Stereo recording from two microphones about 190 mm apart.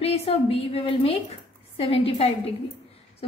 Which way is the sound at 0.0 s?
30° left (ahead or behind).